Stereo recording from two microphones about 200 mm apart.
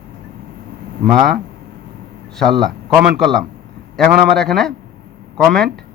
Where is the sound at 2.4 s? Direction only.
Centre (ahead or behind).